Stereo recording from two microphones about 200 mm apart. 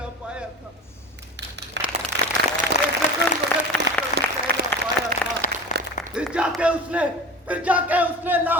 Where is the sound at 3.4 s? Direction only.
60° right (ahead or behind).